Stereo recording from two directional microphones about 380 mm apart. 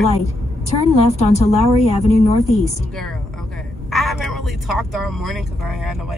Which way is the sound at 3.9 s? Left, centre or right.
Centre.